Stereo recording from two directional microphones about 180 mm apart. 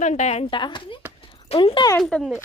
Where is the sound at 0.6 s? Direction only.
25° left (ahead or behind).